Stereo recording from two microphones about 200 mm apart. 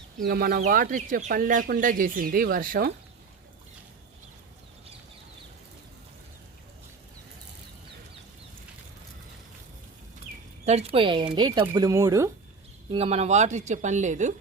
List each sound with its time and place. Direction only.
0.2 s speech: 50° right (ahead or behind)
10.7 s speech: 30° right (ahead or behind); by 12.3 s 15° right (ahead or behind)
12.9 s speech: 30° right (ahead or behind)